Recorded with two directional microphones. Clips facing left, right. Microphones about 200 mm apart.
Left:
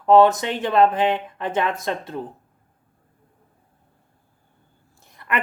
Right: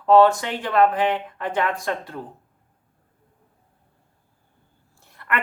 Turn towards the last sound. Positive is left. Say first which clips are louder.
# left 1 dB
turn(degrees=15)  # may be behind; listen again after turning